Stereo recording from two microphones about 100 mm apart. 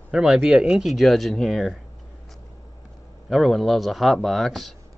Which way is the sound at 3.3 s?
Centre (ahead or behind).